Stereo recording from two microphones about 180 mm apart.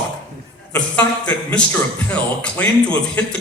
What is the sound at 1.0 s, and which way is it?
A man's voice, 5° left (ahead or behind).